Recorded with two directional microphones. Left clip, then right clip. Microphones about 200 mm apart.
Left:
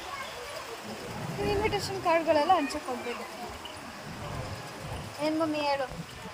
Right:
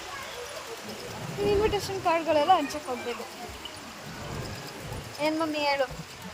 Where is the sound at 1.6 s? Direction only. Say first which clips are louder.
Right 2 dB; 30° right (ahead or behind).